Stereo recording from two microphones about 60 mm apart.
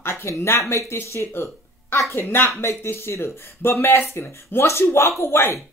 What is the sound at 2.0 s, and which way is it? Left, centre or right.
Speech, left.